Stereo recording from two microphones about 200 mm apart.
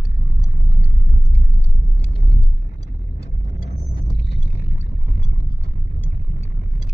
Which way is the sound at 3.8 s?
30° left (ahead or behind).